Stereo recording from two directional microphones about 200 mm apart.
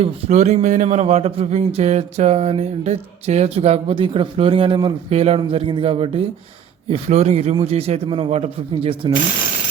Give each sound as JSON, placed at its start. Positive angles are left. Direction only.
{"t": 0.0, "sound": "a man's voice", "side_deg": -35}